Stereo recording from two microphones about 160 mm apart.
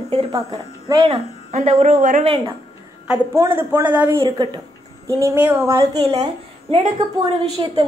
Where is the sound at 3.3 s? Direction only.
15° right (ahead or behind).